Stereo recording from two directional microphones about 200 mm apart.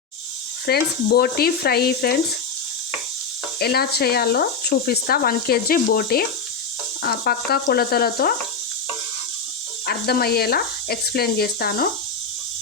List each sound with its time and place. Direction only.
0.6 s speech: 50° left (ahead or behind)
3.6 s speech: 50° left (ahead or behind)
9.8 s speech: 50° left (ahead or behind)